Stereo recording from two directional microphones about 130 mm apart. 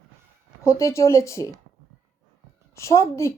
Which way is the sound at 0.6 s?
20° left (ahead or behind).